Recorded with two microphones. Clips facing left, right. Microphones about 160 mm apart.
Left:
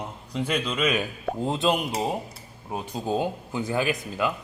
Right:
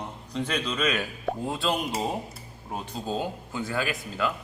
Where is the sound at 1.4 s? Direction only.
20° left (ahead or behind).